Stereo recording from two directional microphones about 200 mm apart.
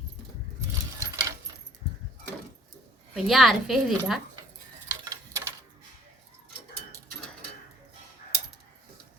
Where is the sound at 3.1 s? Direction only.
Centre (ahead or behind).